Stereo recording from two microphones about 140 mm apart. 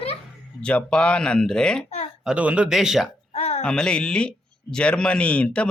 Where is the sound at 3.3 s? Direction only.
50° left (ahead or behind).